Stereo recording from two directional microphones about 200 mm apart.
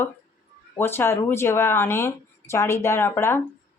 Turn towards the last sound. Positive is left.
turn(degrees=10)  # may be behind; listen again after turning